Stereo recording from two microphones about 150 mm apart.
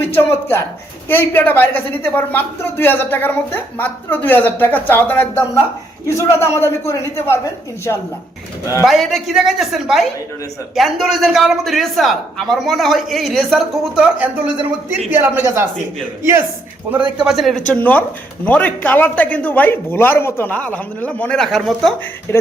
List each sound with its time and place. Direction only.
0.0 s a sound: 15° left (ahead or behind)
1.0 s a woman's voice: 15° left (ahead or behind)
8.8 s a man's voice: centre (ahead or behind)
16.9 s a man's voice: 5° right (ahead or behind)
17.7 s a woman's voice: 10° left (ahead or behind)
22.3 s a woman's voice: 15° left (ahead or behind)